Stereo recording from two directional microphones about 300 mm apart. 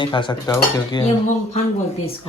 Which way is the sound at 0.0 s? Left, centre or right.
Centre.